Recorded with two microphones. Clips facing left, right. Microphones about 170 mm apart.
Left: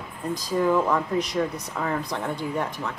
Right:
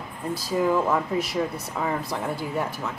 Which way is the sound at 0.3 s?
5° right (ahead or behind).